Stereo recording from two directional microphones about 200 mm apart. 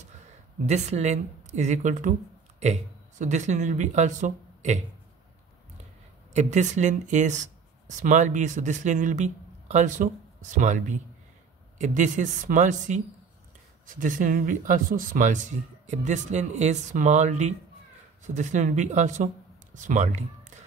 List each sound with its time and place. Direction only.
0.7 s speech: 35° right (ahead or behind)
6.3 s speech: 35° right (ahead or behind)